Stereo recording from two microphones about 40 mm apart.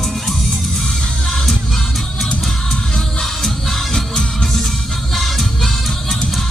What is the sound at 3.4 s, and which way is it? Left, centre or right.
Music, centre.